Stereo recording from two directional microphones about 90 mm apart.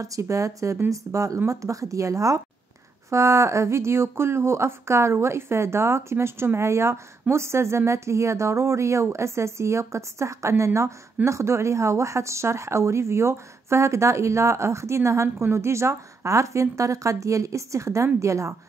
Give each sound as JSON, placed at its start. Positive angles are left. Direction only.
{"t": 0.0, "sound": "speech", "side_deg": -40}